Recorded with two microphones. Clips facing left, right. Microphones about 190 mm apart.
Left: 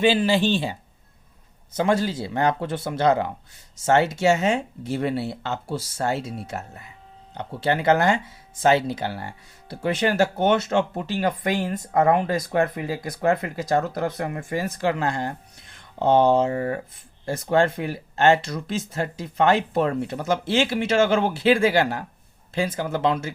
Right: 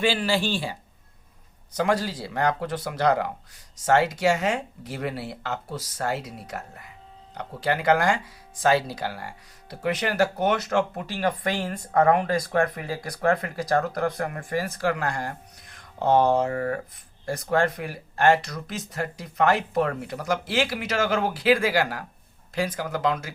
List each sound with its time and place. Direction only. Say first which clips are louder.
0.0 s speech: left 5 dB; 20° left (ahead or behind)